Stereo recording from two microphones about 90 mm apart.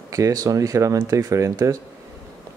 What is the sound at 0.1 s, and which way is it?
Speech, 40° right (ahead or behind).